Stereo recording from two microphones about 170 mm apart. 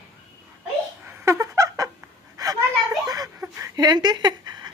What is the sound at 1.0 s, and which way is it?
Dog, 15° right (ahead or behind).